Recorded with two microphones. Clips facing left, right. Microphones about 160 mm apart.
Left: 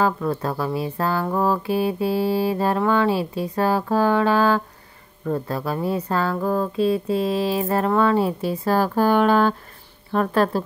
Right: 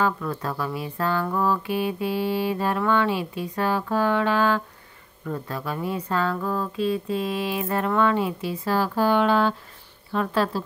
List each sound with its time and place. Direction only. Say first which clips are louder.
0.0 s speech: left 4 dB; 35° left (ahead or behind); by 10.6 s 50° left (ahead or behind)